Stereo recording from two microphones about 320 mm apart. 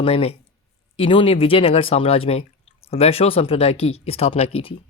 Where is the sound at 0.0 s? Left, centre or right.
Centre.